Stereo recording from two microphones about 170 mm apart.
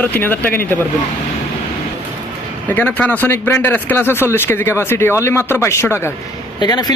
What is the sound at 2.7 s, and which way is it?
Speech, 10° left (ahead or behind).